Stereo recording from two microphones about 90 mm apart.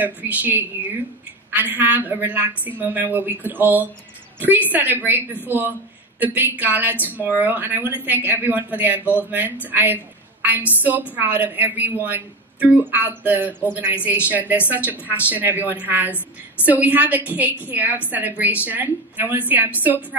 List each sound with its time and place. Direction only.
0.0 s a woman's voice: 20° right (ahead or behind)